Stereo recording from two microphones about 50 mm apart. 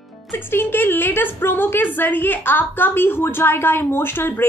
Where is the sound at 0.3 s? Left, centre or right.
Left.